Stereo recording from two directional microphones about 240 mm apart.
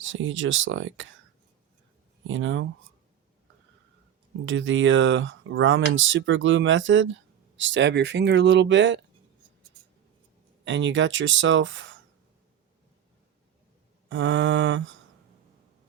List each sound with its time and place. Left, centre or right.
0.0 s speech: right
2.2 s speech: right
4.4 s speech: right
10.6 s speech: right
14.1 s speech: right